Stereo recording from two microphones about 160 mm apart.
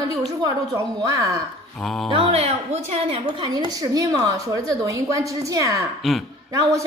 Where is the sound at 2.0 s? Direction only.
35° right (ahead or behind).